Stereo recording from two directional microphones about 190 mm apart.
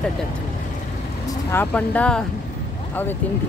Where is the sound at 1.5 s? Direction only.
10° left (ahead or behind).